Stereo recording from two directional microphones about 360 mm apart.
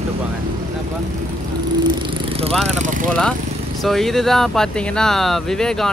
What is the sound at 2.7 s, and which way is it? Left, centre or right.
Speech, centre.